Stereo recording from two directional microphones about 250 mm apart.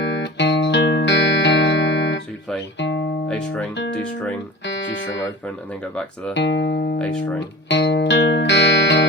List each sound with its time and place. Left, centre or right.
0.0 s music: left
3.2 s speech: centre
3.8 s speech: left
4.6 s music: left
6.3 s speech: left
7.3 s music: left